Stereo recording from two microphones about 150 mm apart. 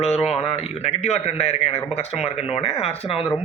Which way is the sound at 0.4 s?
40° left (ahead or behind).